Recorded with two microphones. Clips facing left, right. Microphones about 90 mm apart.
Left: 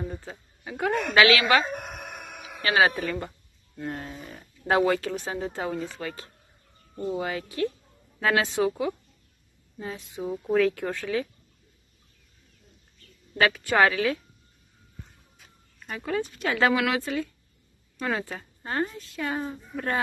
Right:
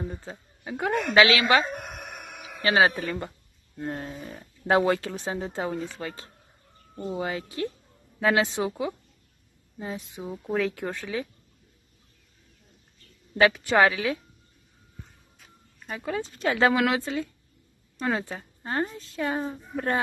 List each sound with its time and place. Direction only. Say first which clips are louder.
0.2 s speech: right 1 dB; 25° right (ahead or behind)
1.8 s a sound: left 1 dB; 5° left (ahead or behind)
2.6 s speech: right 1 dB; 25° right (ahead or behind)
13.4 s speech: right 1 dB; 20° right (ahead or behind)
15.3 s a sound: right 1 dB; centre (ahead or behind)
16.1 s a woman's voice: even; 25° right (ahead or behind)